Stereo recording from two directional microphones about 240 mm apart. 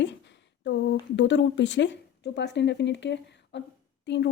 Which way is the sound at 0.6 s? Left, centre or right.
Left.